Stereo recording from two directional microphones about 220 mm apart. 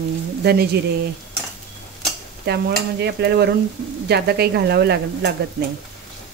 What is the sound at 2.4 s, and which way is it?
Stir, 50° right (ahead or behind).